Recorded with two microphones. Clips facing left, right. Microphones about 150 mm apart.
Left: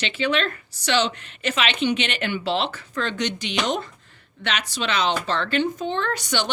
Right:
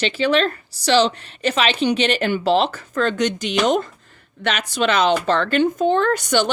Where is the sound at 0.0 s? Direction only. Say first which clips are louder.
Right 5 dB; 35° right (ahead or behind).